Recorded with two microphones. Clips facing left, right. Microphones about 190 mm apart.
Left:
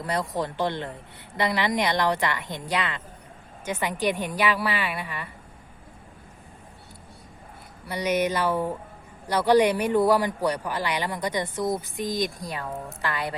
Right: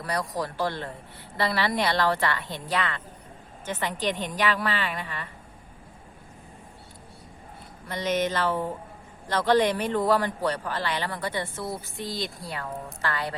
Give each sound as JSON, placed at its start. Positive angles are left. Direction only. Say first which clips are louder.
{"t": 0.0, "sound": "a man's voice", "louder": "left 2 dB", "side_deg": 25}
{"t": 7.9, "sound": "a man's voice", "louder": "left 2 dB", "side_deg": 10}